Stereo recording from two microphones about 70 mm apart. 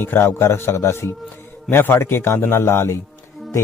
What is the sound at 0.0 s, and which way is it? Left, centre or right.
Speech, left.